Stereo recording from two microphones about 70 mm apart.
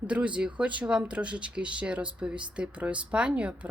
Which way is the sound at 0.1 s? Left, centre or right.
Centre.